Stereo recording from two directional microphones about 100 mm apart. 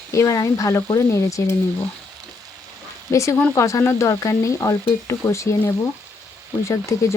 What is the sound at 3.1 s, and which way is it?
Speech, 30° left (ahead or behind).